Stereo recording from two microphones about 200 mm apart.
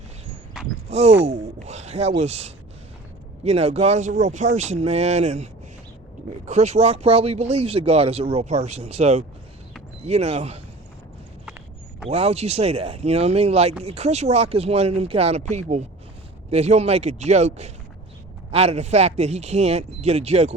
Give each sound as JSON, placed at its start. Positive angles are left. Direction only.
{"t": 0.9, "sound": "a sound", "side_deg": -30}
{"t": 1.6, "sound": "speech", "side_deg": -35}
{"t": 12.0, "sound": "speech", "side_deg": -30}